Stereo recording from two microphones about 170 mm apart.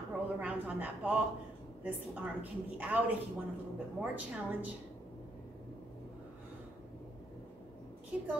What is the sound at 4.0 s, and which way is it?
Speech, 10° right (ahead or behind).